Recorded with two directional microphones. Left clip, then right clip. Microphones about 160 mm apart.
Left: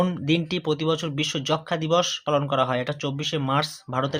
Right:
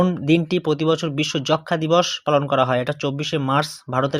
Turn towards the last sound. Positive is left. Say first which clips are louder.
# right 4 dB
turn(degrees=-35)  # may be behind; listen again after turning